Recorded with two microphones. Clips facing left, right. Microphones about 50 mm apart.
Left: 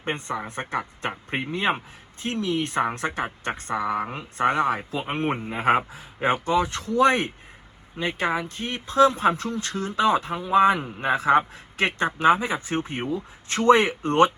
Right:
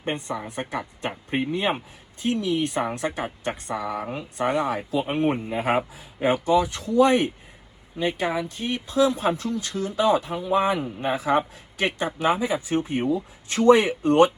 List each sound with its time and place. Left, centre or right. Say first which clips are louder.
0.0 s speech: even; left